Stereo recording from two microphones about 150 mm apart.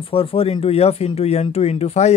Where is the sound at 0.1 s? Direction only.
40° left (ahead or behind).